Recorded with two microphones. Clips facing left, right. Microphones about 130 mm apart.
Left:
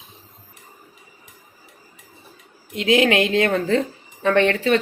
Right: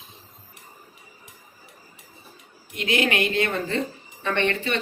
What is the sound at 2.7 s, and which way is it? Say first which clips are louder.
Speech: left 7 dB; 90° left.